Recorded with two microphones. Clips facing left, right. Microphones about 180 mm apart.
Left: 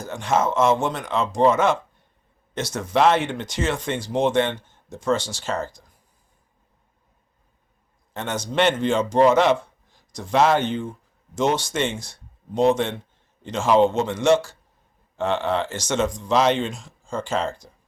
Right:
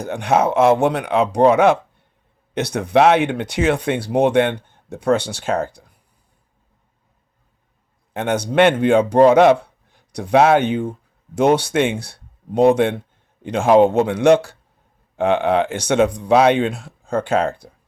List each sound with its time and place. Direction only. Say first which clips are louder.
0.0 s speech: right 5 dB; 60° right (ahead or behind)
8.1 s a man's voice: right 7 dB; 55° right (ahead or behind)